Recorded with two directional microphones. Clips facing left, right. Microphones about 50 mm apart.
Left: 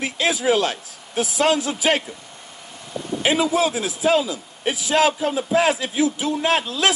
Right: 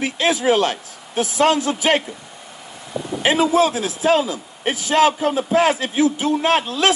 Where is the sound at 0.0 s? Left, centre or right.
Right.